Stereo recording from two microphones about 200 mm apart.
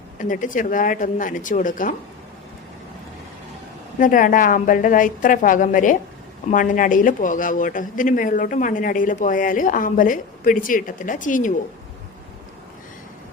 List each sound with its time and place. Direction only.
0.2 s speech: 40° left (ahead or behind)
4.0 s a woman's voice: 40° left (ahead or behind)